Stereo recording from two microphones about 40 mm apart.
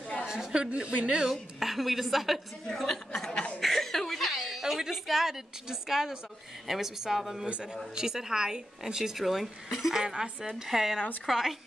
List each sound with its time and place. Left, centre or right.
0.2 s a sound: centre
0.7 s speech: right
1.0 s a woman's voice: centre
1.3 s a woman's voice: centre
2.7 s a woman's voice: centre
3.6 s chuckle: centre
6.7 s a woman's voice: centre
7.4 s speech: right
7.9 s a woman's voice: centre
9.2 s a woman's voice: centre
10.0 s speech: centre
10.5 s a woman's voice: centre